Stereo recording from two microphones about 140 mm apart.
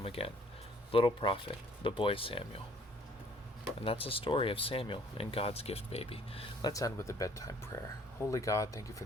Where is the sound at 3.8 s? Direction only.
40° left (ahead or behind).